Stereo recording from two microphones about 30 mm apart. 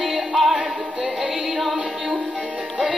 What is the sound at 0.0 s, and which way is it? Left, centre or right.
Music, centre.